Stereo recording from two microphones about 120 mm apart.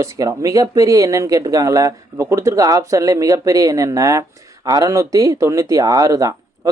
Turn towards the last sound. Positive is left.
turn(degrees=-30)  # may be behind; listen again after turning